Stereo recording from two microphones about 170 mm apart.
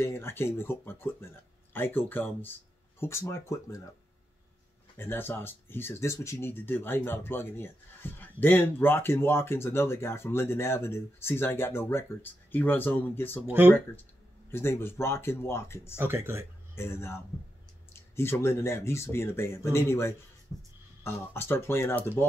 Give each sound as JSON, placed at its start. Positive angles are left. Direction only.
{"t": 0.0, "sound": "speech", "side_deg": 15}
{"t": 4.9, "sound": "speech", "side_deg": 15}
{"t": 13.5, "sound": "speech", "side_deg": -10}
{"t": 14.5, "sound": "speech", "side_deg": 15}
{"t": 16.0, "sound": "speech", "side_deg": -15}
{"t": 16.7, "sound": "speech", "side_deg": 15}